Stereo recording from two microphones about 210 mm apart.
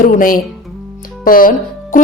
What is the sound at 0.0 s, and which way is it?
A woman's voice, 40° left (ahead or behind).